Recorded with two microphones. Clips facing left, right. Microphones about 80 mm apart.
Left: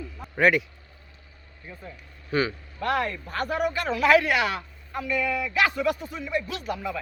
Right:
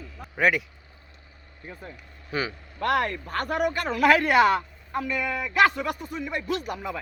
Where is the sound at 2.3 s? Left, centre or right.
Centre.